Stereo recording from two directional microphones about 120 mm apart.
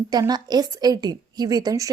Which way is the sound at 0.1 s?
35° right (ahead or behind).